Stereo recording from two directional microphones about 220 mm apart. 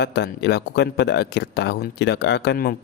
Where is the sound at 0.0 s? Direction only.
50° left (ahead or behind).